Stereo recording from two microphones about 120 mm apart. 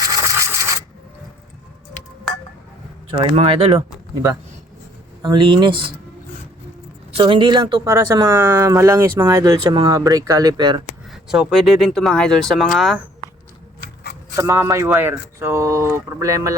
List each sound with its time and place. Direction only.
0.0 s scratch: 25° right (ahead or behind)
3.3 s speech: 50° right (ahead or behind)
4.1 s speech: 25° right (ahead or behind)
5.2 s speech: 40° right (ahead or behind)
7.2 s speech: 40° right (ahead or behind)
7.9 s speech: 25° right (ahead or behind)
11.1 s speech: 5° right (ahead or behind)
14.3 s speech: 20° right (ahead or behind)